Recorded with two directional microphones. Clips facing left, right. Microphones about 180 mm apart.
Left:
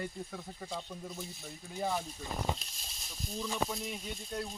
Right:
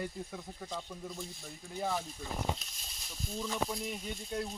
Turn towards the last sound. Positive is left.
turn(degrees=0)  # may be behind; listen again after turning